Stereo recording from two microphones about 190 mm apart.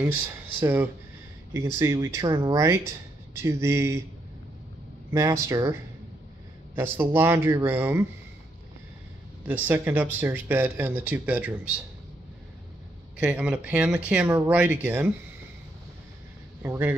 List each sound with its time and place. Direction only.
0.0 s speech: 10° right (ahead or behind)
5.1 s speech: 15° right (ahead or behind)
9.5 s speech: 10° right (ahead or behind)
13.2 s speech: 5° right (ahead or behind)
16.6 s speech: 10° right (ahead or behind)